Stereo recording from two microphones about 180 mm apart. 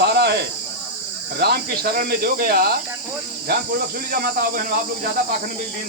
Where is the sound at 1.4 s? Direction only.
60° right (ahead or behind).